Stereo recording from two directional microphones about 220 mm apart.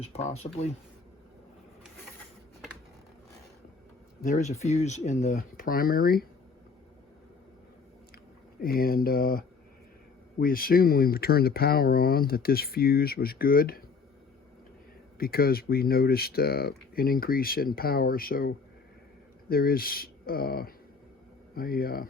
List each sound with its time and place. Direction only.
0.0 s speech: 30° left (ahead or behind)
4.2 s speech: 35° left (ahead or behind)
8.6 s speech: 40° left (ahead or behind)
10.4 s speech: 40° left (ahead or behind)
15.2 s speech: 45° left (ahead or behind)